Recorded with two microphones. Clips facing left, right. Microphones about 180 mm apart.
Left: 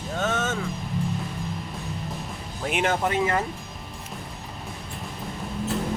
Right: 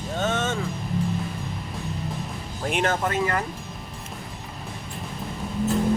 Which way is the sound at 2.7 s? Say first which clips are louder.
Right 1 dB; 5° left (ahead or behind).